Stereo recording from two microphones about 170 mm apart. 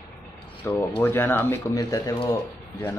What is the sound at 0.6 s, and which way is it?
Speech, 15° left (ahead or behind).